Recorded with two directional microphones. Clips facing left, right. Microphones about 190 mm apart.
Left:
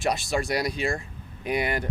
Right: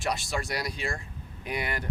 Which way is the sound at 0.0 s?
20° left (ahead or behind).